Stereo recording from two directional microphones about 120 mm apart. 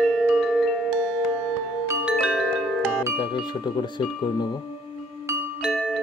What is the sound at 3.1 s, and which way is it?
Speech, 40° left (ahead or behind).